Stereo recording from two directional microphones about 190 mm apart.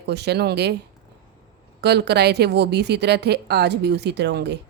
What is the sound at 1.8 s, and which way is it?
A woman's voice, 60° right (ahead or behind).